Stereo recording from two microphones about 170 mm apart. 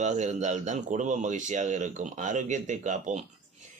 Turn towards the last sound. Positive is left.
turn(degrees=-45)  # may be behind; listen again after turning